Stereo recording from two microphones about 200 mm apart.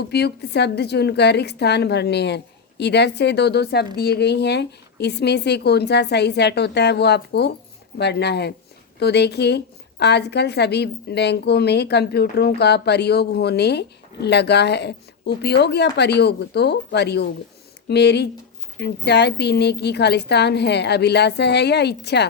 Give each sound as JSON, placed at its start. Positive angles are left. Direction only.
{"t": 0.1, "sound": "a woman's voice", "side_deg": 55}